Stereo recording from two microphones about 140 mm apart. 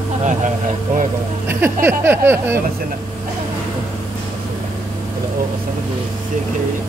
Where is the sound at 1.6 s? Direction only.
15° right (ahead or behind).